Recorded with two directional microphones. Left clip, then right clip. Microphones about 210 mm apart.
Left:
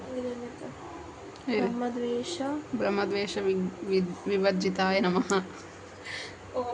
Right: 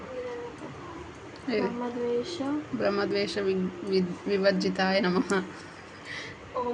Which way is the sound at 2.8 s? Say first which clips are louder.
Right 1 dB; 10° left (ahead or behind).